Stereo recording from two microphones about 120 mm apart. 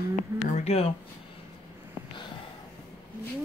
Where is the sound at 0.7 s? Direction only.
55° left (ahead or behind).